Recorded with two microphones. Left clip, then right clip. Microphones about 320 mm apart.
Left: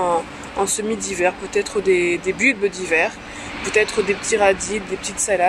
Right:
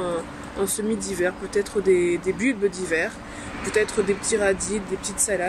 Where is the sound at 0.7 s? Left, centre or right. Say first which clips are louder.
Left 3 dB; centre.